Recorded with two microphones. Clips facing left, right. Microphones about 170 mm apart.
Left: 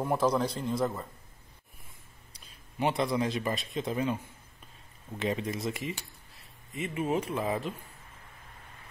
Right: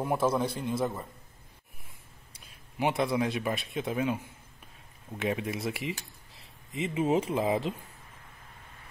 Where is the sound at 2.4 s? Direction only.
5° right (ahead or behind).